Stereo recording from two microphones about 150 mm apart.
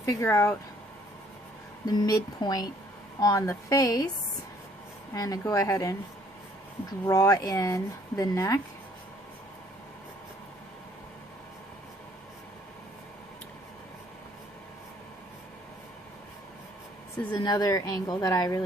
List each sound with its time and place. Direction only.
0.0 s speech: 20° left (ahead or behind)
1.9 s speech: 25° left (ahead or behind)
5.1 s speech: 25° left (ahead or behind)
7.0 s speech: 20° left (ahead or behind)
17.4 s speech: 25° left (ahead or behind)